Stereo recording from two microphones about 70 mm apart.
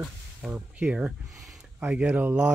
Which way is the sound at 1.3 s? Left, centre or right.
Centre.